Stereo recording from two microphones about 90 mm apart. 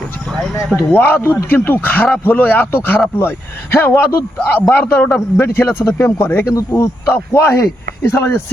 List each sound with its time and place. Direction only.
0.8 s speech: 20° left (ahead or behind)